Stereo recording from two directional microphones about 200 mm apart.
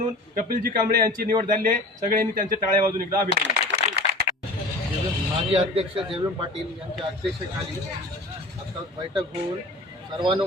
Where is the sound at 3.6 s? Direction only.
55° right (ahead or behind).